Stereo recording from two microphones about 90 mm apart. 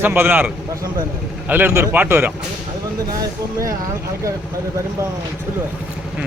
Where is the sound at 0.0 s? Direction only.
25° right (ahead or behind).